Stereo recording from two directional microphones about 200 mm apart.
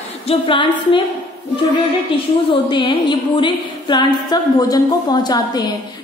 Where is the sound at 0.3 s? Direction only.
25° left (ahead or behind).